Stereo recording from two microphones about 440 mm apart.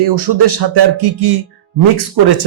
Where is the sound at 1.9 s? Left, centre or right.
Right.